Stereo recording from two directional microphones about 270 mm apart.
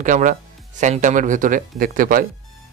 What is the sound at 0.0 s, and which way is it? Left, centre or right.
Speech, right.